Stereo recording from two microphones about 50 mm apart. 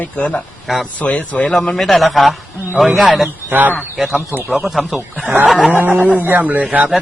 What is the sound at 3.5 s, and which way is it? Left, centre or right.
Speech, right.